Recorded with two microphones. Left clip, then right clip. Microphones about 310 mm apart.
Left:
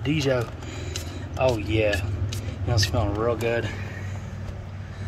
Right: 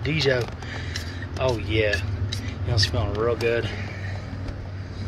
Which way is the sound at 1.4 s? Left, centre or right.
Centre.